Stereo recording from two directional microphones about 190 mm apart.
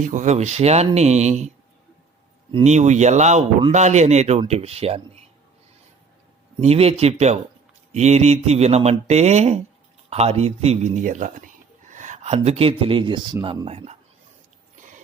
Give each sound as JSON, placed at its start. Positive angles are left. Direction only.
{"t": 0.0, "sound": "speech", "side_deg": -40}
{"t": 2.5, "sound": "speech", "side_deg": -30}
{"t": 6.6, "sound": "a man's voice", "side_deg": -30}